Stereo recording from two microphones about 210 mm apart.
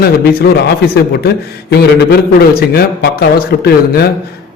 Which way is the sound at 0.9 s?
50° left (ahead or behind).